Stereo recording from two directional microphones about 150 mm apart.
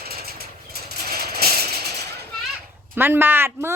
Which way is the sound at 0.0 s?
90° right.